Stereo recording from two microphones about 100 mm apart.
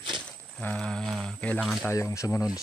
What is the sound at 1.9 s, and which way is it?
Speech, 30° left (ahead or behind).